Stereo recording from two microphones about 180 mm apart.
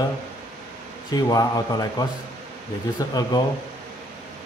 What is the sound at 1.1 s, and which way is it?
A man's voice, 20° left (ahead or behind).